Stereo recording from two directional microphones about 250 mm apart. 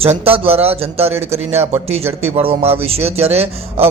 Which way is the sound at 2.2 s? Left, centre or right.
Right.